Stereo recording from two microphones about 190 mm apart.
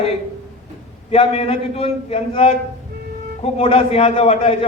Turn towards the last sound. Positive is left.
turn(degrees=30)  # may be behind; listen again after turning